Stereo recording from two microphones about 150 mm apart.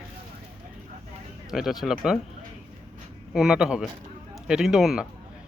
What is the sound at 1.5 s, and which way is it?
Speech, centre (ahead or behind).